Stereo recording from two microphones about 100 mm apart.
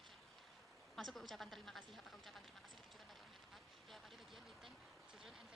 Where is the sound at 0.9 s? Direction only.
Centre (ahead or behind).